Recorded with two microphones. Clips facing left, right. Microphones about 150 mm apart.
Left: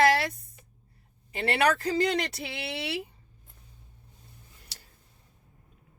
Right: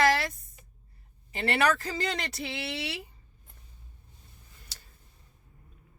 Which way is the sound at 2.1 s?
60° left (ahead or behind).